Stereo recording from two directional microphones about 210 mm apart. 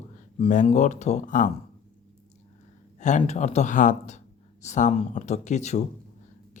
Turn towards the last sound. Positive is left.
turn(degrees=35)  # may be behind; listen again after turning